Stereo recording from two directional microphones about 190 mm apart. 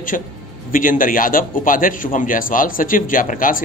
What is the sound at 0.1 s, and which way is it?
A man's voice, 40° left (ahead or behind).